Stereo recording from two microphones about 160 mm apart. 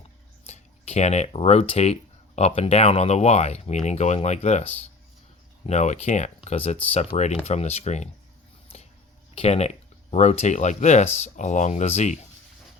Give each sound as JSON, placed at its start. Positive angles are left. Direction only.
{"t": 0.4, "sound": "speech", "side_deg": 45}
{"t": 8.7, "sound": "a sound", "side_deg": 40}
{"t": 9.3, "sound": "speech", "side_deg": 40}